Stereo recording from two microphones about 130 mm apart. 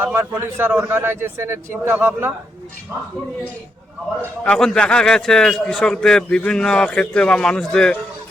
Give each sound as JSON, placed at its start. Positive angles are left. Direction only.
{"t": 0.0, "sound": "a man's voice", "side_deg": -15}
{"t": 4.4, "sound": "a man's voice", "side_deg": 5}